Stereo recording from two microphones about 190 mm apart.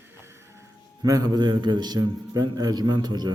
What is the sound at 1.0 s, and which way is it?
A man's voice, 20° right (ahead or behind).